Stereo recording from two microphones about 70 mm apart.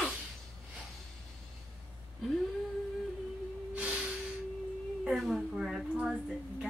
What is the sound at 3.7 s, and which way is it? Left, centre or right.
Snort, right.